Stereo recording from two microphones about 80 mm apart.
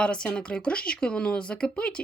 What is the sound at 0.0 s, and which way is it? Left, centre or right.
Speech, centre.